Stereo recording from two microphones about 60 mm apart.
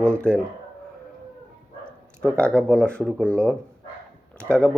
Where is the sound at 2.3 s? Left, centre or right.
Centre.